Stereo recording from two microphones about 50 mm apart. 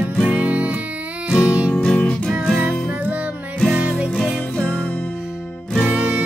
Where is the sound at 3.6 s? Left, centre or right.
Centre.